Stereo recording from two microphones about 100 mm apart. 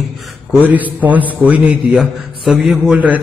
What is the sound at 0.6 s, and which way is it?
A man's voice, 15° right (ahead or behind).